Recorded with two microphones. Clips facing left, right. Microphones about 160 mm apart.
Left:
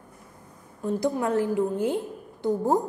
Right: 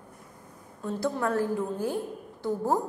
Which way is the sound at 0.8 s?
15° left (ahead or behind).